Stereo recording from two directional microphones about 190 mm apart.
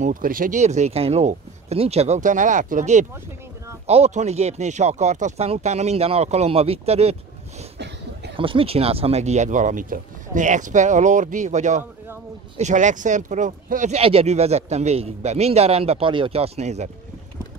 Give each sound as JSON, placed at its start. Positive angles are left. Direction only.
{"t": 0.0, "sound": "speech", "side_deg": -45}
{"t": 8.4, "sound": "speech", "side_deg": -30}